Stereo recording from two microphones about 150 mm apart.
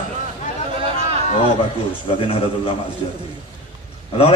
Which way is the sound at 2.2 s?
40° left (ahead or behind).